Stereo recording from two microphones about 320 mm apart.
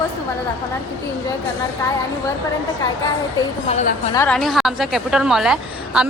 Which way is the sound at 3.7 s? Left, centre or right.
Left.